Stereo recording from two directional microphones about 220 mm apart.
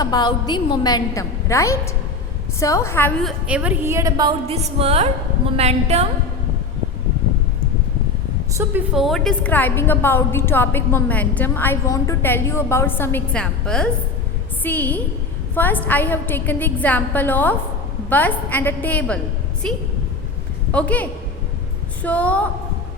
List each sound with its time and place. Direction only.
0.0 s a woman's voice: 20° left (ahead or behind); by 6.1 s 30° right (ahead or behind)
8.5 s a woman's voice: 5° right (ahead or behind)
20.7 s a woman's voice: 5° left (ahead or behind)